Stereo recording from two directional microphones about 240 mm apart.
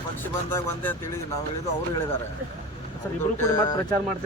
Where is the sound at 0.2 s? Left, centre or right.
Centre.